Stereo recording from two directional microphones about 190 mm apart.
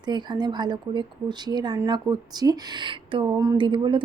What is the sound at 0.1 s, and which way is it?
Speech, 20° right (ahead or behind).